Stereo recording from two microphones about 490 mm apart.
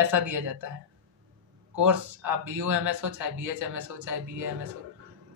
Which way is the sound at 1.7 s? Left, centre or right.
Right.